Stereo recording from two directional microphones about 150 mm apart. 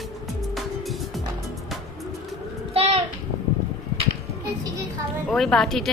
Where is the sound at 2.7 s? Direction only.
40° right (ahead or behind).